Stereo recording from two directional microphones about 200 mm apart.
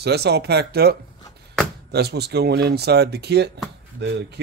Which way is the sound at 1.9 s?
55° right (ahead or behind).